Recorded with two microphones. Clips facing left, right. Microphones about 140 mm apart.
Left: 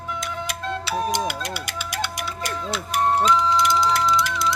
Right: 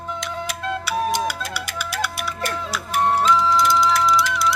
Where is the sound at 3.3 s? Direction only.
20° left (ahead or behind).